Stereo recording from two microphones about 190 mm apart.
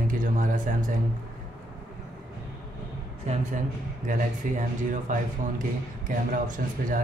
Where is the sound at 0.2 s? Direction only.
45° right (ahead or behind).